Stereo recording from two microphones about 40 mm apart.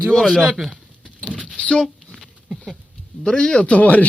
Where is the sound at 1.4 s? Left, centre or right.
Left.